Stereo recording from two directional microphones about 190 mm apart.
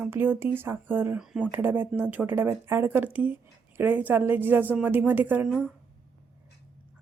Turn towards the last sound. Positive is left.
turn(degrees=-5)  # may be behind; listen again after turning